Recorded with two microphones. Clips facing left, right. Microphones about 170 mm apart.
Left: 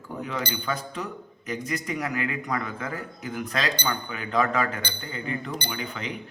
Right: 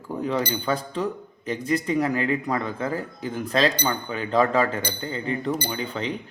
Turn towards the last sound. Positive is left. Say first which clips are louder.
# right 5 dB
turn(degrees=-30)  # may be behind; listen again after turning